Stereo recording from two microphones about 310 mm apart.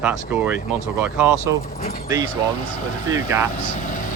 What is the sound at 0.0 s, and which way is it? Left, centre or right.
Speech, centre.